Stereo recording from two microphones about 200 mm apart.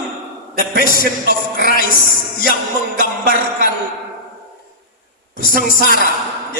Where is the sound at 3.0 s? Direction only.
45° left (ahead or behind).